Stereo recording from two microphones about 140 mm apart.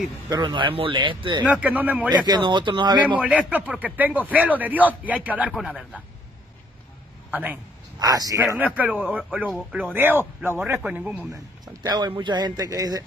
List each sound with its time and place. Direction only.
0.3 s speech: 35° right (ahead or behind)
1.5 s speech: 10° right (ahead or behind)
2.0 s speech: 30° right (ahead or behind)
3.2 s speech: 10° right (ahead or behind)
7.2 s a man's voice: 10° right (ahead or behind)
8.0 s speech: 25° right (ahead or behind)
8.5 s speech: 10° right (ahead or behind)
11.6 s speech: 30° right (ahead or behind)